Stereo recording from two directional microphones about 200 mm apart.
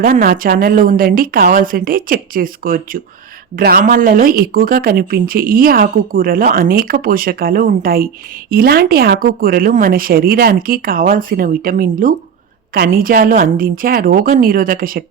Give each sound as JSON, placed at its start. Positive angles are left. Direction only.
{"t": 0.0, "sound": "speech", "side_deg": -45}